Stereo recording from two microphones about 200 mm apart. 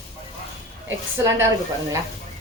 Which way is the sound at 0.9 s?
10° right (ahead or behind).